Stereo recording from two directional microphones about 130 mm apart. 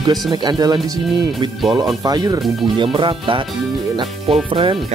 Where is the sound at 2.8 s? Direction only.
40° right (ahead or behind).